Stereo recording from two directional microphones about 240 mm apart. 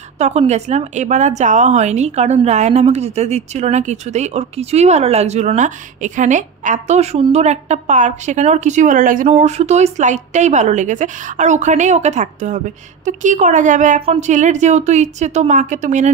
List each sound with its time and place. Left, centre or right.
0.2 s a woman's voice: right